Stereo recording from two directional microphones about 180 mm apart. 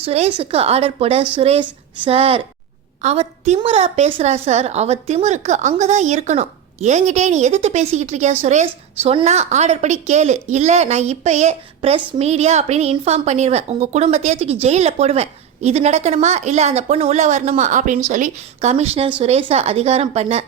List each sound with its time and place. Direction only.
0.0 s speech: 35° right (ahead or behind)